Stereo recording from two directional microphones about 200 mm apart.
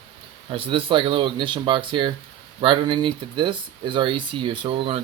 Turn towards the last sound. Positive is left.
turn(degrees=-25)  # may be behind; listen again after turning